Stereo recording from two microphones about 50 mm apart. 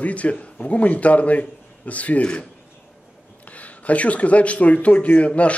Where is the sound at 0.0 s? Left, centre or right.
Left.